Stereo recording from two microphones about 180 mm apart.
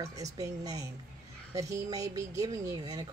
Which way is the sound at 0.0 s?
20° right (ahead or behind).